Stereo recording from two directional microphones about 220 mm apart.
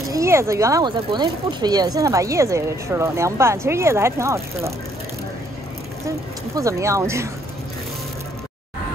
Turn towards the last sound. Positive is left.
turn(degrees=-15)  # may be behind; listen again after turning